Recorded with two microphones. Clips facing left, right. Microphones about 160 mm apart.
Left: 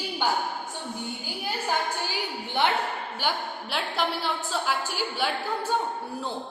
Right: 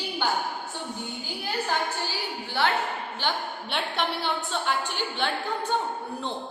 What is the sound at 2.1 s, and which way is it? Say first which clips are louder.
A woman's voice: left 1 dB; 20° left (ahead or behind).